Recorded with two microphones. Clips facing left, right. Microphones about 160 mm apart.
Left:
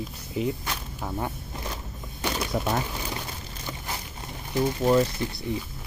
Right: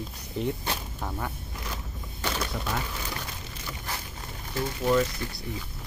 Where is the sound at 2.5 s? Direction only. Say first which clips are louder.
Left 7 dB; 40° left (ahead or behind).